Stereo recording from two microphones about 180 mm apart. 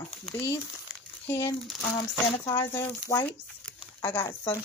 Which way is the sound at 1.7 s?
Centre (ahead or behind).